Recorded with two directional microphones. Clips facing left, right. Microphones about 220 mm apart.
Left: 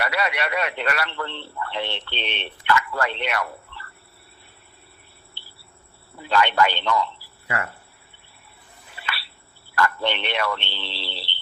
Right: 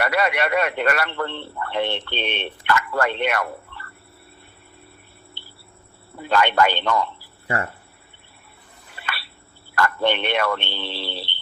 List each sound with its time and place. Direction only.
0.0 s a man's voice: 50° right (ahead or behind)
6.1 s a man's voice: 50° right (ahead or behind)
7.4 s speech: 30° right (ahead or behind)
9.0 s a sound: 50° right (ahead or behind)
9.7 s a man's voice: 50° right (ahead or behind)